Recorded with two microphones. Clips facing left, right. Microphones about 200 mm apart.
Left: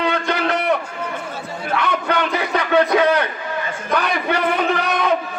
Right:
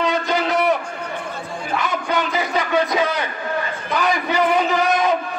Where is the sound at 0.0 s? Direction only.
60° left (ahead or behind).